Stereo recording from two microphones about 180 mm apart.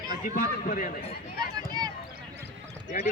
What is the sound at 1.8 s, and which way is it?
Clip-clop, 20° right (ahead or behind).